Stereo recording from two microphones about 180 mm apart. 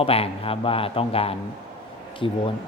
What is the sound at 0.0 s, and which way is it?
Speech, 30° left (ahead or behind).